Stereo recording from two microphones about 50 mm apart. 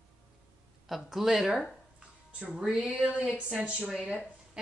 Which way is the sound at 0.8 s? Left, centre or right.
Centre.